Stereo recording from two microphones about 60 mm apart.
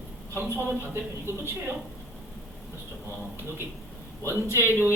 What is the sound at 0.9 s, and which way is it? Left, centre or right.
Speech, right.